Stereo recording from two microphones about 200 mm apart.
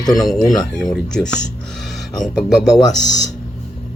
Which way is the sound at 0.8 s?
5° left (ahead or behind).